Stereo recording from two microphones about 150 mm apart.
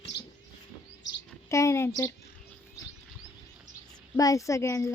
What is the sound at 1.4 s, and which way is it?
Speech, 20° left (ahead or behind).